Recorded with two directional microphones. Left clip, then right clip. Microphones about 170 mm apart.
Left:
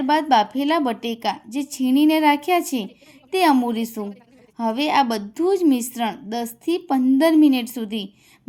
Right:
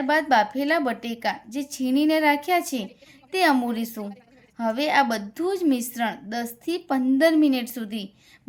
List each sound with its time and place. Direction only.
0.0 s a woman's voice: 15° left (ahead or behind)